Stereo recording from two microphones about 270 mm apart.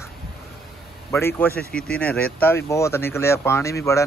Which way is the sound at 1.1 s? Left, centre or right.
Centre.